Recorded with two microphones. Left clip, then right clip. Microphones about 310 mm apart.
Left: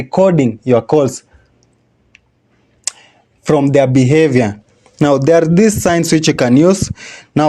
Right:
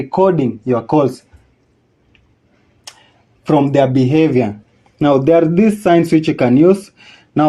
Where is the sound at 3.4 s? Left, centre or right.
Left.